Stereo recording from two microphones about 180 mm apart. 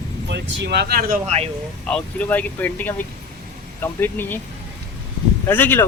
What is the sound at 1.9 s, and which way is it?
Speech, 5° left (ahead or behind).